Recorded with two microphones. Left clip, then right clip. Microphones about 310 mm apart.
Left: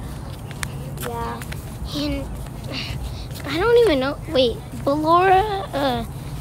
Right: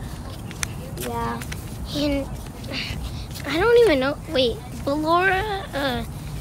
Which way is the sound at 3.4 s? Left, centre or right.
Centre.